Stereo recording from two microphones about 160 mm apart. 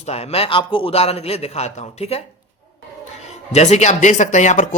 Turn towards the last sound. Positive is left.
turn(degrees=50)  # may be behind; listen again after turning